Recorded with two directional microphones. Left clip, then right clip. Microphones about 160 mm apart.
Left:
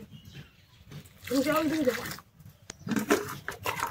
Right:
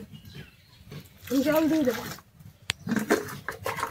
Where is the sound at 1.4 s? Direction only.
20° left (ahead or behind).